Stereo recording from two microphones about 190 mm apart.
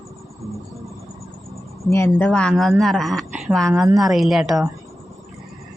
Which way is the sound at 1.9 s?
10° left (ahead or behind).